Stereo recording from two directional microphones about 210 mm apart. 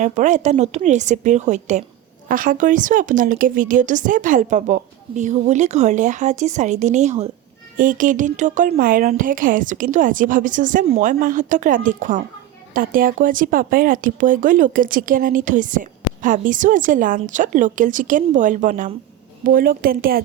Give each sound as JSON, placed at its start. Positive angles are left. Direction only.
{"t": 0.0, "sound": "a woman's voice", "side_deg": -35}